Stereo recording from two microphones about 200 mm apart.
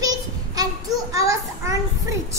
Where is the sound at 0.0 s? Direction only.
20° right (ahead or behind).